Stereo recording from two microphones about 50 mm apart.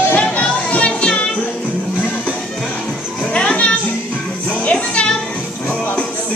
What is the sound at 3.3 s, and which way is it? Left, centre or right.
Children playing, left.